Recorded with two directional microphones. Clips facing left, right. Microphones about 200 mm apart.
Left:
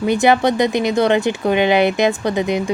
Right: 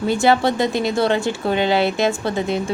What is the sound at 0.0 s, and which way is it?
Speech, 20° left (ahead or behind).